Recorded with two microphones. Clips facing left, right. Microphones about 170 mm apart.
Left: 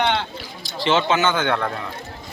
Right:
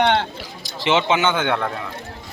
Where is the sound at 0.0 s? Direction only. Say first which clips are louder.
Right 3 dB; 55° right (ahead or behind).